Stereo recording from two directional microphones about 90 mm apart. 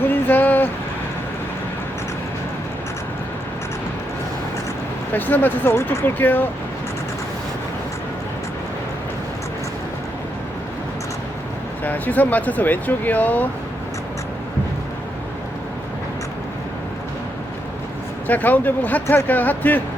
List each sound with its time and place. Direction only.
0.1 s a sound: 20° left (ahead or behind)
5.1 s speech: 20° left (ahead or behind)
11.8 s speech: 20° left (ahead or behind)
18.3 s speech: 20° left (ahead or behind)